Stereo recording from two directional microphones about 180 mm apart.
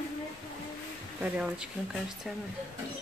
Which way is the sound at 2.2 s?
Centre (ahead or behind).